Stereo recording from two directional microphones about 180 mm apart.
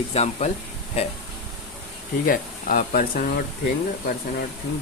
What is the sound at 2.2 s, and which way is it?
Speech, 50° left (ahead or behind).